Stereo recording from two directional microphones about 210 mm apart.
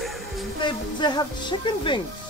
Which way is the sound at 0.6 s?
20° left (ahead or behind).